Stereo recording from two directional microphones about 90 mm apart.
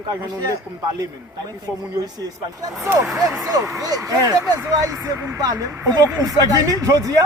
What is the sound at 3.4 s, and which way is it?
Speech, 40° right (ahead or behind).